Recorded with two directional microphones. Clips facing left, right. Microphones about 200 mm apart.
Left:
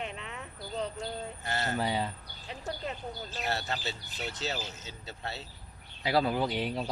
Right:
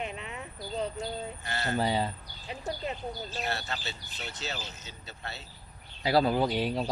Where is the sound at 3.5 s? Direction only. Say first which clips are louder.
Left 2 dB; 35° left (ahead or behind).